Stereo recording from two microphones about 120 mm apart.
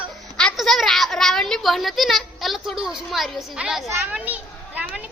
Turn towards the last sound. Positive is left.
turn(degrees=-10)  # may be behind; listen again after turning